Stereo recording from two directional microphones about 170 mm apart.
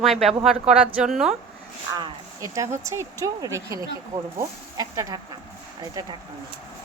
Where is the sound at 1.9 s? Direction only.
20° right (ahead or behind).